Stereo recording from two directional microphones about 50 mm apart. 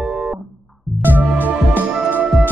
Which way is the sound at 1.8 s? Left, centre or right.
Right.